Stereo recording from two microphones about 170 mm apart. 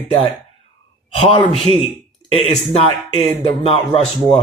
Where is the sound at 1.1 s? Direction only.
30° left (ahead or behind).